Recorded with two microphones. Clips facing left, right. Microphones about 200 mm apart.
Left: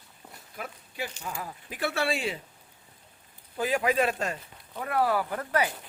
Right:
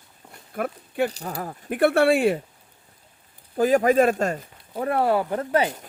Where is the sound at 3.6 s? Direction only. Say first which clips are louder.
Right 8 dB; 45° right (ahead or behind); by 5.7 s 25° right (ahead or behind).